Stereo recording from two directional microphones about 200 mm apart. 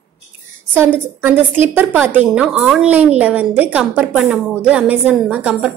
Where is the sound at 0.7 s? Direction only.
10° right (ahead or behind).